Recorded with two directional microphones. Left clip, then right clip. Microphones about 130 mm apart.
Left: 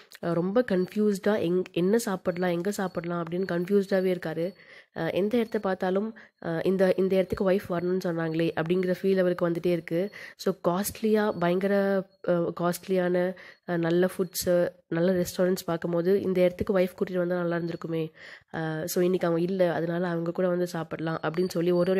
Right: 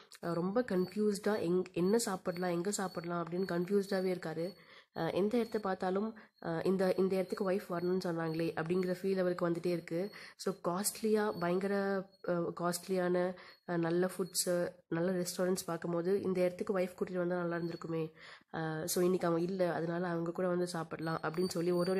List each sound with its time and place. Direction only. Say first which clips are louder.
0.2 s speech: left 9 dB; 30° left (ahead or behind)
7.8 s a woman's voice: left 7 dB; 15° left (ahead or behind)
8.1 s speech: left 8 dB; 30° left (ahead or behind)